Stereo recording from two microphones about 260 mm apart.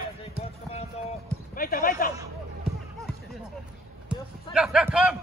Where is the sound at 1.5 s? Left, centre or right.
Left.